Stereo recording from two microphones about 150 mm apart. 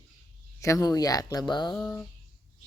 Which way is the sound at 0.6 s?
20° left (ahead or behind).